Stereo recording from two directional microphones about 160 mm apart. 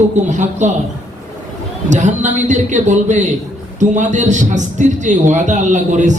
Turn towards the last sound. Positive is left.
turn(degrees=-50)  # may be behind; listen again after turning